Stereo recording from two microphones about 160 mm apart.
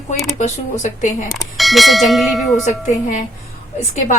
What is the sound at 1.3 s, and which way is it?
Speech, centre (ahead or behind).